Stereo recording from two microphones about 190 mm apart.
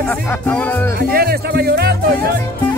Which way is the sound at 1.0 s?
55° right (ahead or behind).